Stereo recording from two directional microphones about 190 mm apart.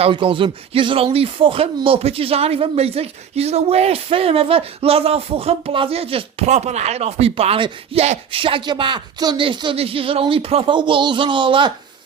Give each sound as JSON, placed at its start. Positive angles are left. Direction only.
{"t": 0.0, "sound": "speech", "side_deg": -25}